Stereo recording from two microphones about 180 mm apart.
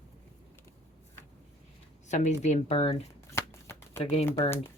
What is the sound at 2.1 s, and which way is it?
Speech, 40° left (ahead or behind).